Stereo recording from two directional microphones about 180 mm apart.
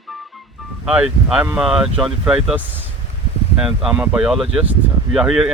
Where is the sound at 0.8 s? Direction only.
5° right (ahead or behind).